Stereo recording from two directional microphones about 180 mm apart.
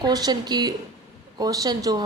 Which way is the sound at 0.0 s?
20° right (ahead or behind).